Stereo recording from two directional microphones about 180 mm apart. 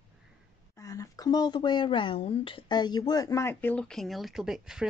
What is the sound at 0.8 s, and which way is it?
Speech, 20° left (ahead or behind).